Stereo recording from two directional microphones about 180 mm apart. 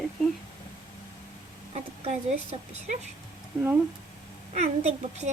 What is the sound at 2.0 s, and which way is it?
A woman's voice, 35° right (ahead or behind).